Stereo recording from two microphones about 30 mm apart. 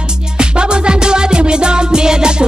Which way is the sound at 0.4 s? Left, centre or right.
Right.